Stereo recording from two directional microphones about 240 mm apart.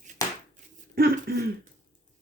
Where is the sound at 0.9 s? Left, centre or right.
Right.